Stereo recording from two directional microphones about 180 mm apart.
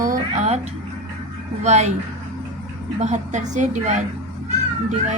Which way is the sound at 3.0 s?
40° right (ahead or behind).